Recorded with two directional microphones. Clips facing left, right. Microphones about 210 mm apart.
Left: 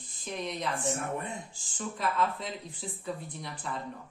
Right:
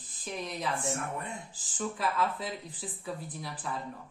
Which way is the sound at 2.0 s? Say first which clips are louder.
Left 2 dB; 5° right (ahead or behind).